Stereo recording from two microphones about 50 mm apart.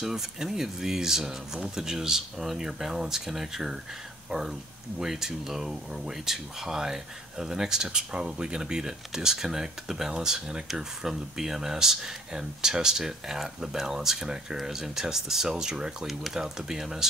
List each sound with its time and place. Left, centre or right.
0.0 s speech: centre
16.1 s speech: centre